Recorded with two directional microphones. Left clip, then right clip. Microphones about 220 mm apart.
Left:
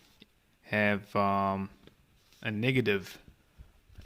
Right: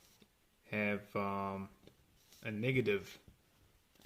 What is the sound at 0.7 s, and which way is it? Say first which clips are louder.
Speech: left 9 dB; 40° left (ahead or behind).